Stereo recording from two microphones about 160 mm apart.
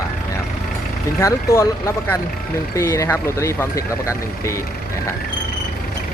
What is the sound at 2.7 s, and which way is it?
Speech, 20° left (ahead or behind).